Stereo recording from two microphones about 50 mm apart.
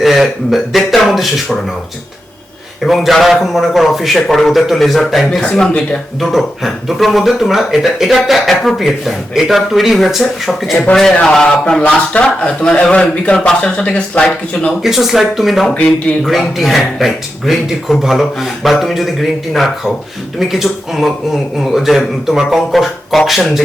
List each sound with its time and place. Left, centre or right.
0.0 s speech: centre
2.8 s speech: centre
10.9 s a man's voice: centre
14.8 s speech: centre